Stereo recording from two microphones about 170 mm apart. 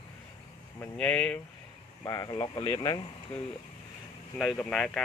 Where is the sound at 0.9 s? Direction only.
5° left (ahead or behind).